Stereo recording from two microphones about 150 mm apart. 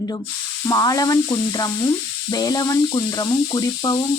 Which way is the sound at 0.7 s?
25° left (ahead or behind).